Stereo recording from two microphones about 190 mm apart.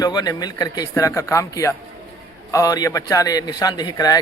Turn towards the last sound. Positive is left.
turn(degrees=20)  # may be behind; listen again after turning